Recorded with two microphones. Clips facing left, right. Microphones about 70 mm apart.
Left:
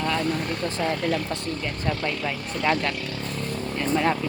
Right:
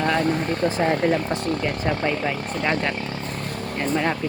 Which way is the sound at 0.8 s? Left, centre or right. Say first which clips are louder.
Right 3 dB; right.